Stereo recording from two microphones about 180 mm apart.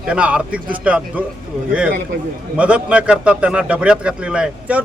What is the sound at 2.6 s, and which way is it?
A man's voice, 5° right (ahead or behind).